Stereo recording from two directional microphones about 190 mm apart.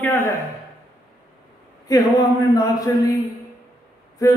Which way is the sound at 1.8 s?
15° left (ahead or behind).